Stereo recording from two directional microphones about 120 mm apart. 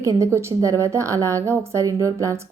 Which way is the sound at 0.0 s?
25° right (ahead or behind).